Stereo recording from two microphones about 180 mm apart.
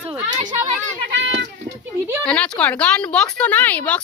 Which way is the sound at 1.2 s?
80° right.